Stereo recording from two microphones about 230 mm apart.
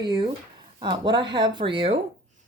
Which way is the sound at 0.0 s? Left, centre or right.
Centre.